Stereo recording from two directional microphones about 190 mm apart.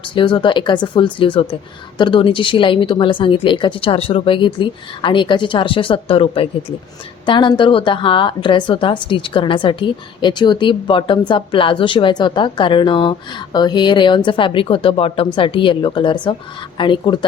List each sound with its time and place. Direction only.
0.1 s a woman's voice: 25° left (ahead or behind)